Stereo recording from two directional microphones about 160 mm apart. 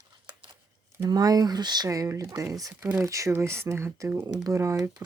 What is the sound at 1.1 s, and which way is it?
Speech, 25° right (ahead or behind).